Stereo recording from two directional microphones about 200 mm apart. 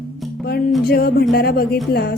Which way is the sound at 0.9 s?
50° left (ahead or behind).